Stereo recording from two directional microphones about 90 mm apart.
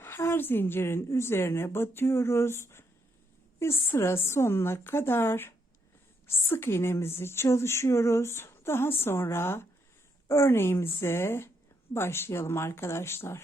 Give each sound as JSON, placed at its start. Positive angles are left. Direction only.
{"t": 0.0, "sound": "a woman's voice", "side_deg": 30}